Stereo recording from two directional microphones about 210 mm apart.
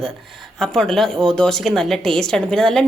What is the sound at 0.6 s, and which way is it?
A woman's voice, centre (ahead or behind).